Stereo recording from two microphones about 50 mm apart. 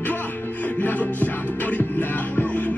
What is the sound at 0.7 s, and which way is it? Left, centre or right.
Music, left.